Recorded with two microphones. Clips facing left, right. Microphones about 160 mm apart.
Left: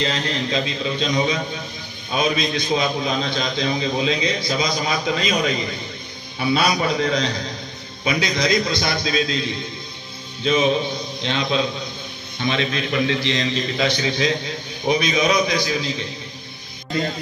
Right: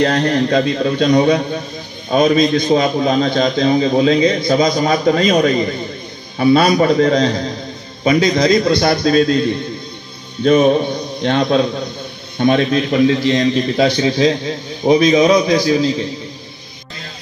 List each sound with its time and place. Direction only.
0.0 s a man's voice: 65° right (ahead or behind)
2.1 s a man's voice: 50° right (ahead or behind)
12.4 s a man's voice: 45° right (ahead or behind)